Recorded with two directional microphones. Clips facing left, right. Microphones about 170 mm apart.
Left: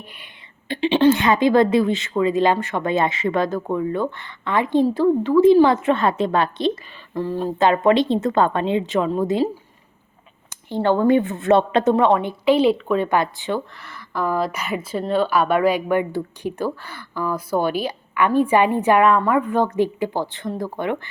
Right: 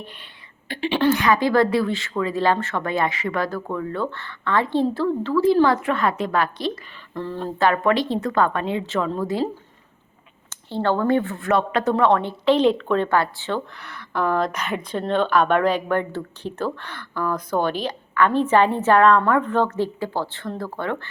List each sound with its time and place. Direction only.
0.7 s a woman's voice: 20° left (ahead or behind)
7.2 s a woman's voice: 10° left (ahead or behind)
10.7 s speech: 15° left (ahead or behind)
13.7 s speech: centre (ahead or behind)